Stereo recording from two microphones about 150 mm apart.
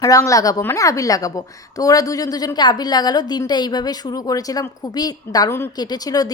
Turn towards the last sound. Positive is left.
turn(degrees=25)  # may be behind; listen again after turning